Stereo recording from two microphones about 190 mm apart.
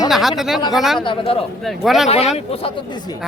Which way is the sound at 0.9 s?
25° left (ahead or behind).